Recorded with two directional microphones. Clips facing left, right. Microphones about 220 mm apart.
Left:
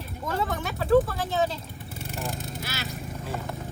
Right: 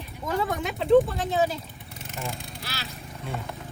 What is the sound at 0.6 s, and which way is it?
Speech, 20° right (ahead or behind).